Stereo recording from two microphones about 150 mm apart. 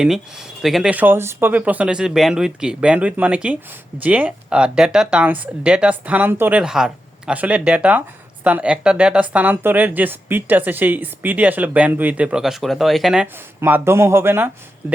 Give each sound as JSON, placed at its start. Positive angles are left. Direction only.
{"t": 0.6, "sound": "speech", "side_deg": 0}
{"t": 13.2, "sound": "speech", "side_deg": -10}